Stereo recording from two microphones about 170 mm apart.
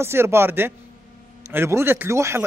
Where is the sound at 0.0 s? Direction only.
15° right (ahead or behind).